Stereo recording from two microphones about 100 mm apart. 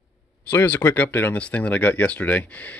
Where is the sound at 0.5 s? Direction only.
20° left (ahead or behind).